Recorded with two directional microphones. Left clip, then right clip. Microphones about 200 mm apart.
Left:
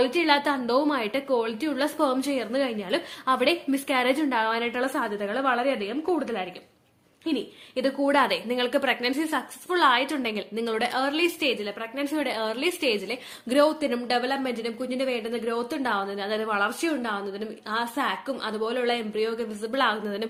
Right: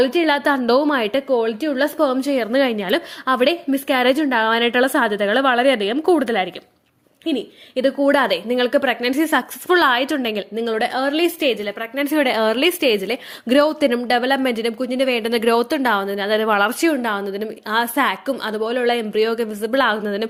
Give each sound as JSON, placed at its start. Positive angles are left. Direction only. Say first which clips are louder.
{"t": 0.0, "sound": "a woman's voice", "louder": "right 5 dB", "side_deg": -30}
{"t": 7.3, "sound": "a woman's voice", "louder": "right 6 dB", "side_deg": -25}